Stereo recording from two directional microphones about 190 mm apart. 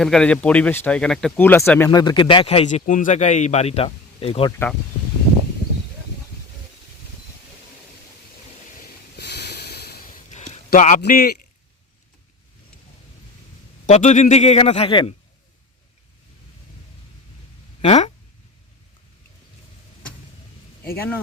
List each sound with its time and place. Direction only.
0.0 s speech: 5° left (ahead or behind); by 4.5 s 30° left (ahead or behind)
9.6 s a sound: 55° left (ahead or behind)
13.8 s a man's voice: 40° left (ahead or behind)
17.8 s a man's voice: 35° left (ahead or behind)